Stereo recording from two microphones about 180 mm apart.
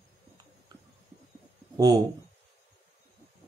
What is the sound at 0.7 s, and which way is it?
Stomach rumble, 20° right (ahead or behind).